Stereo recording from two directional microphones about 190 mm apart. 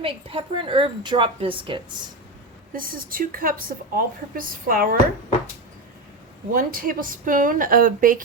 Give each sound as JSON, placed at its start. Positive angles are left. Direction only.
{"t": 0.0, "sound": "a woman's voice", "side_deg": -30}
{"t": 2.7, "sound": "a woman's voice", "side_deg": -50}
{"t": 6.5, "sound": "a woman's voice", "side_deg": -45}